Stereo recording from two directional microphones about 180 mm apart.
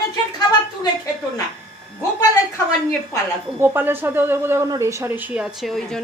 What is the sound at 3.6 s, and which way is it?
Speech, 10° right (ahead or behind).